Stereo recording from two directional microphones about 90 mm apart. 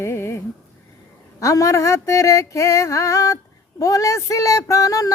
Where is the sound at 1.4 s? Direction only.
35° left (ahead or behind).